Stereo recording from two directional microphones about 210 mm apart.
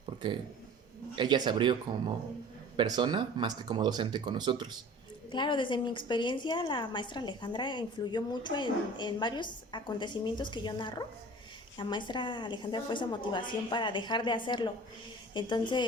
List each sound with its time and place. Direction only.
0.0 s a sound: 25° right (ahead or behind)
1.1 s speech: 20° right (ahead or behind)
2.7 s speech: 20° right (ahead or behind)
5.3 s a woman's voice: 20° left (ahead or behind)